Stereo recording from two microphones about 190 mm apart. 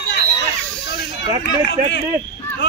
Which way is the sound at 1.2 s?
70° left (ahead or behind).